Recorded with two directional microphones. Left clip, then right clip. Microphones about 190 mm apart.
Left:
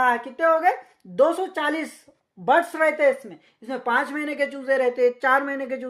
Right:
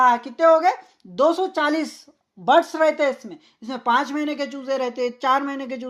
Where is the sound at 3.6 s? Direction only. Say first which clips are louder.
Right 2 dB; 40° right (ahead or behind).